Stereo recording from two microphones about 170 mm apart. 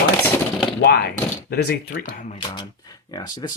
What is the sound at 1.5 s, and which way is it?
Speech, 70° left (ahead or behind).